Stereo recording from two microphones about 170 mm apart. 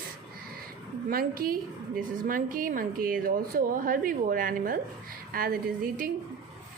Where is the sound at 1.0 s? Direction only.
60° right (ahead or behind).